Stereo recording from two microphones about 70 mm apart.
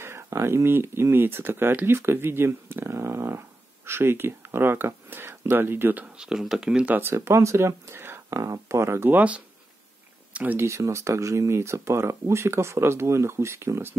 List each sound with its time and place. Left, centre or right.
0.0 s speech: right
6.1 s speech: centre
7.0 s speech: right
9.1 s speech: centre
10.6 s speech: right